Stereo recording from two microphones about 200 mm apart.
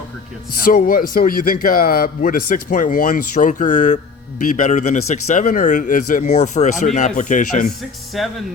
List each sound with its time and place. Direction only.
0.6 s a man's voice: 45° left (ahead or behind)
8.1 s speech: centre (ahead or behind)